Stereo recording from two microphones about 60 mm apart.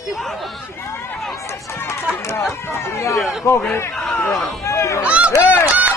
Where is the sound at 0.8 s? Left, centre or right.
Left.